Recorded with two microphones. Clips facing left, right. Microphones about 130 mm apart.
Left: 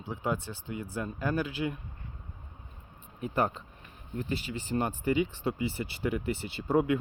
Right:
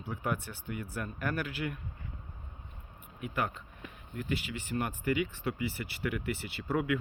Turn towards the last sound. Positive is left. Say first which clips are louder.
# left 5 dB
turn(degrees=25)  # may be behind; listen again after turning